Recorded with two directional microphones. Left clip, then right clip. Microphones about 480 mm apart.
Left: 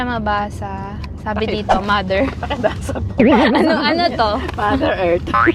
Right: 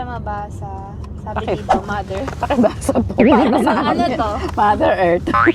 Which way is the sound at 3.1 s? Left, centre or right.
Centre.